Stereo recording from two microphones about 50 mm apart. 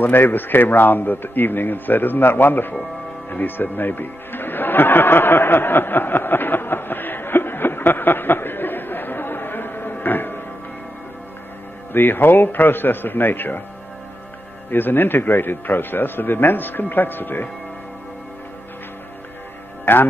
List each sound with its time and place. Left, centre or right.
0.0 s a man's voice: left
3.3 s music: left
11.9 s a man's voice: left
14.7 s a man's voice: left
19.8 s speech: left